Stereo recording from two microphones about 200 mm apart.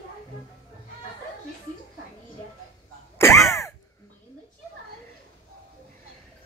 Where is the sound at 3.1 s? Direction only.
15° left (ahead or behind).